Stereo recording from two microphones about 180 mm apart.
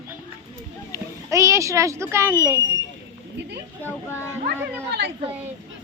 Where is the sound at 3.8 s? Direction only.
15° left (ahead or behind).